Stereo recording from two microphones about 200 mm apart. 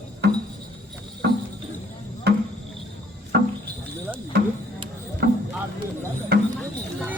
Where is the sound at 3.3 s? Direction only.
55° right (ahead or behind).